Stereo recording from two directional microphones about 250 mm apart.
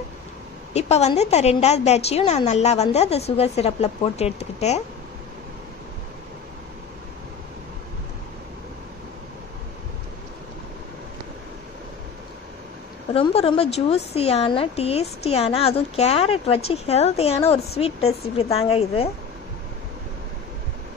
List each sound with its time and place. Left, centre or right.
0.7 s a woman's voice: left
13.1 s a woman's voice: left